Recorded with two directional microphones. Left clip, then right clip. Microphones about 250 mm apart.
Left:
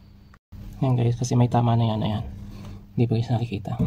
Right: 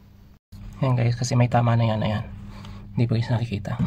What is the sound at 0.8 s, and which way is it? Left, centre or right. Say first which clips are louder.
Speech: even; right.